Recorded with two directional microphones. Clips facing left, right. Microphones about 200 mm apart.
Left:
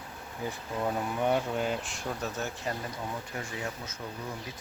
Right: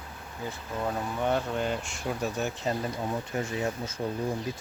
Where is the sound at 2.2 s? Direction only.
20° right (ahead or behind).